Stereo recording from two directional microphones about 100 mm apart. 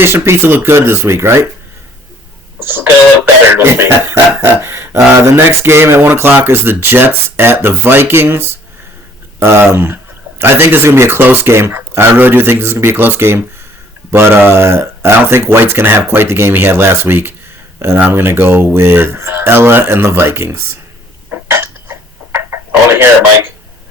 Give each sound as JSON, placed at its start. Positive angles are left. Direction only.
{"t": 0.0, "sound": "speech", "side_deg": -25}
{"t": 3.5, "sound": "speech", "side_deg": -25}
{"t": 21.2, "sound": "a sound", "side_deg": -20}